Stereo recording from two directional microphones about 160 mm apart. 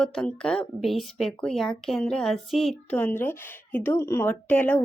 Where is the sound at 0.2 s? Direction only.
5° left (ahead or behind).